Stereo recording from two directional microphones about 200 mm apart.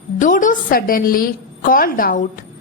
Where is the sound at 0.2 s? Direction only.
40° left (ahead or behind).